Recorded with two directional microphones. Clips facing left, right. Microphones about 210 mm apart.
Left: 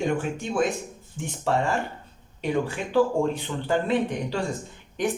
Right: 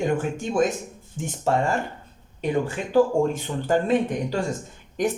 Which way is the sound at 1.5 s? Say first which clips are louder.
Right 2 dB; 45° right (ahead or behind).